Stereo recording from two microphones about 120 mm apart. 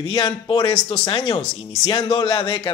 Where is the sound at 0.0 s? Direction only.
45° left (ahead or behind).